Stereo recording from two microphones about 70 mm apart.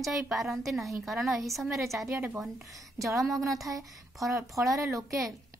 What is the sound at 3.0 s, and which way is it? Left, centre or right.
Speech, right.